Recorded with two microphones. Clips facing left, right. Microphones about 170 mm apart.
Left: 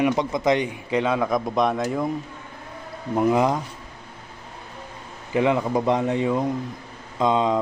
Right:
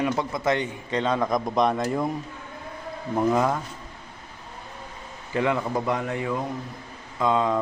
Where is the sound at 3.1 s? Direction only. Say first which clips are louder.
Left 3 dB; 15° left (ahead or behind).